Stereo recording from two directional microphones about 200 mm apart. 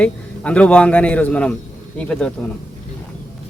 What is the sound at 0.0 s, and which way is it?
Speech, 5° left (ahead or behind).